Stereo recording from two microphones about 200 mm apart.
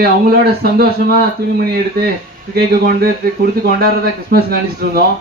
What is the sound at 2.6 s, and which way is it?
A man's voice, 50° right (ahead or behind).